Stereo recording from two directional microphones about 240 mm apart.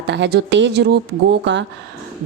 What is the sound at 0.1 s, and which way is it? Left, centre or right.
A woman's voice, right.